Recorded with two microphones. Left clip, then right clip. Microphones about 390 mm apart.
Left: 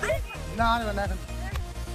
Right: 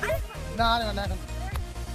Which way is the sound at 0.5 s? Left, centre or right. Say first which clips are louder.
Even; right.